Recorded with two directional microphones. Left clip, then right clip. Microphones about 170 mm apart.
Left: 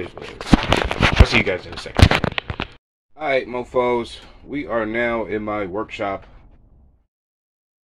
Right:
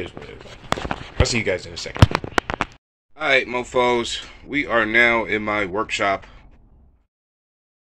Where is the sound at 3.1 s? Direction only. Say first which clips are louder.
Right 2 dB; 5° left (ahead or behind).